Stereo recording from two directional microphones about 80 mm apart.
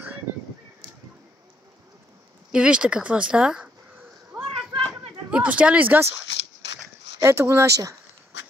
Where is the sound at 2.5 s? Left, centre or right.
Centre.